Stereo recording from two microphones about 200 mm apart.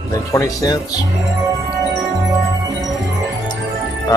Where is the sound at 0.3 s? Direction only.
15° left (ahead or behind).